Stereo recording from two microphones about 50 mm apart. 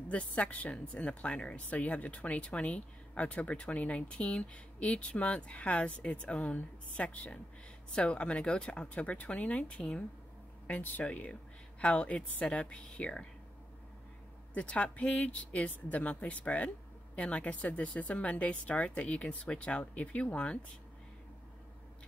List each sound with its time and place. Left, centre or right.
0.1 s a woman's voice: left
10.7 s speech: left
11.1 s a woman's voice: left
14.5 s a woman's voice: left